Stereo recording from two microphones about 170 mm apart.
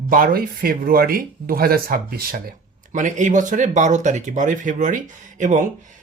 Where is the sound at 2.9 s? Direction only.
45° right (ahead or behind).